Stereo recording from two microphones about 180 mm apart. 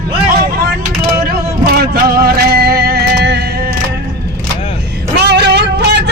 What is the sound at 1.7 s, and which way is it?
Music, 60° right (ahead or behind).